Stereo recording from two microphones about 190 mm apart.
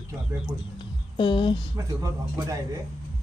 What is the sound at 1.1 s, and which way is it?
Speech, 25° left (ahead or behind).